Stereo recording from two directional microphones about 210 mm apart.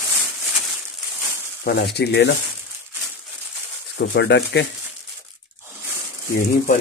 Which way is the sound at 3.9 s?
55° left (ahead or behind).